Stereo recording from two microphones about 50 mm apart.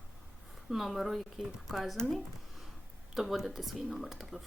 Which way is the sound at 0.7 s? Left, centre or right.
Centre.